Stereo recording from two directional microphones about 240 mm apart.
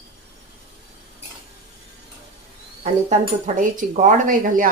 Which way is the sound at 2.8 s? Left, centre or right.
Right.